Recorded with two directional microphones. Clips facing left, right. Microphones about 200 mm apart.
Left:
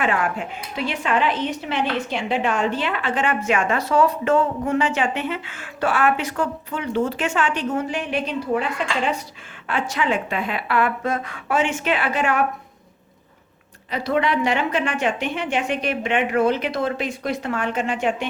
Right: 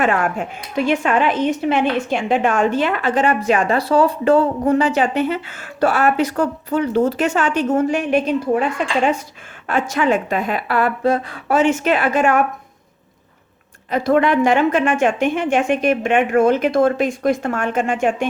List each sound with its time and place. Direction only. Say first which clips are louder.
0.0 s a woman's voice: right 4 dB; 45° right (ahead or behind)
9.6 s a woman's voice: right 5 dB; 45° right (ahead or behind)
13.9 s a woman's voice: right 6 dB; 50° right (ahead or behind)